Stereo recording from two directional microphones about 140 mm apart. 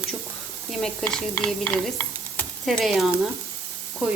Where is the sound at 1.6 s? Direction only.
15° left (ahead or behind).